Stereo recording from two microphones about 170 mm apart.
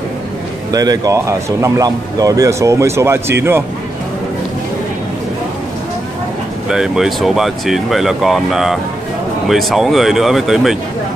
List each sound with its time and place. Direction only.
0.7 s speech: 20° right (ahead or behind)
6.7 s speech: 5° right (ahead or behind)